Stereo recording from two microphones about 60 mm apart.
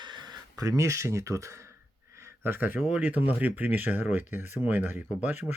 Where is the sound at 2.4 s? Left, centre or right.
Right.